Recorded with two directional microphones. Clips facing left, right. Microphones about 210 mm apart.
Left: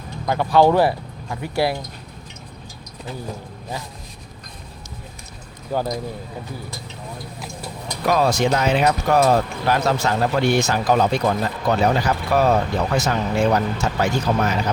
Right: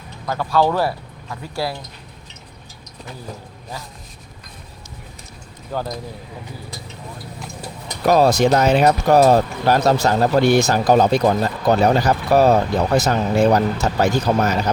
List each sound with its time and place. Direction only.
0.3 s speech: 20° left (ahead or behind)
5.7 s speech: 10° left (ahead or behind)
8.0 s speech: 40° right (ahead or behind)